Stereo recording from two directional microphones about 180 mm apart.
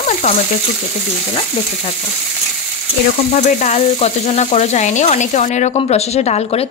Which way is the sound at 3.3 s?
40° left (ahead or behind).